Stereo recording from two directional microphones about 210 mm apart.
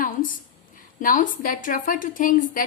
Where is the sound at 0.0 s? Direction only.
40° left (ahead or behind).